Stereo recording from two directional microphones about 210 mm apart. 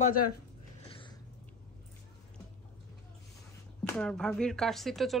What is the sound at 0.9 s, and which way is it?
Cat, 25° left (ahead or behind).